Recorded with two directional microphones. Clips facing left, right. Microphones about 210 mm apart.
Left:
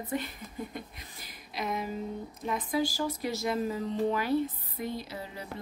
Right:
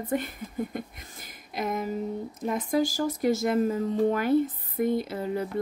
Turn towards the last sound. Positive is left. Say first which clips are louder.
# right 11 dB
turn(degrees=-50)  # may be behind; listen again after turning